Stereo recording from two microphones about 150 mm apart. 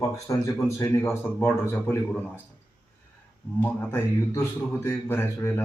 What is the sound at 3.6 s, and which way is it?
A man's voice, 15° left (ahead or behind).